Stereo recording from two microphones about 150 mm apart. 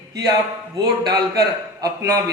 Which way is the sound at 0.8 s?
25° right (ahead or behind).